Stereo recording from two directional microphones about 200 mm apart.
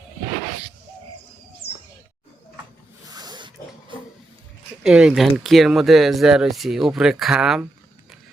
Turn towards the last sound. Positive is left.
turn(degrees=-5)  # may be behind; listen again after turning